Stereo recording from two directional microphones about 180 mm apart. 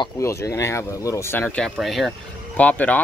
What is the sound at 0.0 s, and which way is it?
Speech, 15° left (ahead or behind).